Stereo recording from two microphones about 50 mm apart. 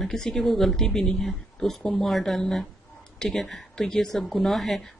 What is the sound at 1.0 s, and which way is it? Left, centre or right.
Speech, left.